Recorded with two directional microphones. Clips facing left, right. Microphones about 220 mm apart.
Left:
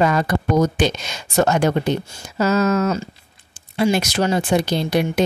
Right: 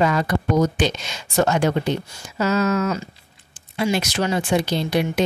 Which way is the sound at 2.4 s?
40° left (ahead or behind).